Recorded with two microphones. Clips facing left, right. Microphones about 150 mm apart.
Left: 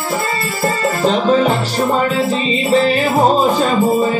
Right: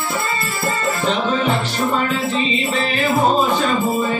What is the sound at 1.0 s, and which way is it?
Music, 40° left (ahead or behind).